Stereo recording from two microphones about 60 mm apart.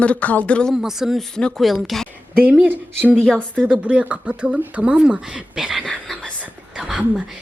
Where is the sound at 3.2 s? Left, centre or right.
Centre.